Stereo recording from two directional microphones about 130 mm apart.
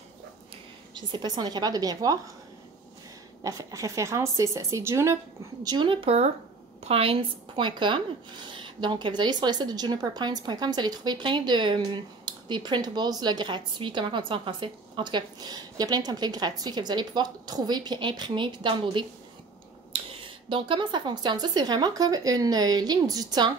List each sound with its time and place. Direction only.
0.9 s a woman's voice: 35° right (ahead or behind)
3.4 s speech: 25° right (ahead or behind)
5.6 s a woman's voice: 35° right (ahead or behind)